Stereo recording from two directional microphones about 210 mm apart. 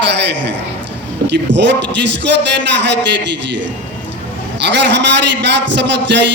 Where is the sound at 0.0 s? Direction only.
55° right (ahead or behind).